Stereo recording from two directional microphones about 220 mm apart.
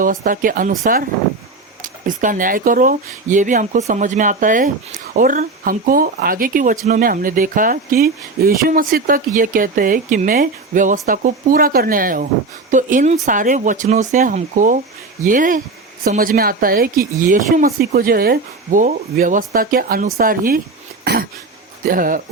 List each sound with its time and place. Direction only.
0.0 s speech: 40° right (ahead or behind)
1.8 s speech: 35° right (ahead or behind)
21.0 s throat clearing: 45° right (ahead or behind)
21.8 s speech: 40° right (ahead or behind)